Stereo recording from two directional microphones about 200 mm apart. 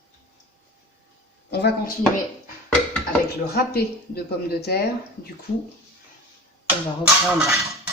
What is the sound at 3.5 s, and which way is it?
Speech, 50° left (ahead or behind).